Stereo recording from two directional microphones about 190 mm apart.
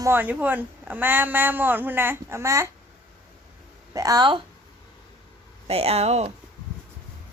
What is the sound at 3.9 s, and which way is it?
Speech, 20° right (ahead or behind).